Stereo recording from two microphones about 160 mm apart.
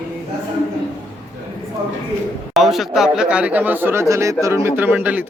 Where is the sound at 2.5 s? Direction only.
Centre (ahead or behind).